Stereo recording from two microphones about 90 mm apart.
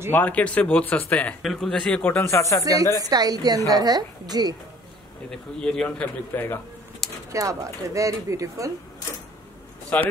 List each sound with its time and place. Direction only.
0.1 s speech: 15° left (ahead or behind)
1.4 s speech: 5° left (ahead or behind)
2.0 s speech: 30° left (ahead or behind)
2.6 s a woman's voice: 40° right (ahead or behind)
5.3 s speech: 10° left (ahead or behind)
6.3 s speech: 25° left (ahead or behind)
7.0 s a sound: 5° left (ahead or behind)
7.3 s speech: 40° right (ahead or behind)
9.9 s speech: 20° left (ahead or behind)